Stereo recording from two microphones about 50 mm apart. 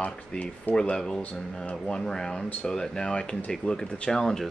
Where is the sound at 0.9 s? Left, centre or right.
Centre.